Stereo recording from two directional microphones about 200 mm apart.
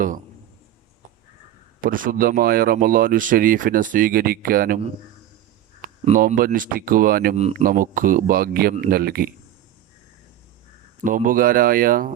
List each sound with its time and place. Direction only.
1.8 s speech: 45° right (ahead or behind)
6.1 s speech: 40° right (ahead or behind)
11.0 s speech: 40° right (ahead or behind)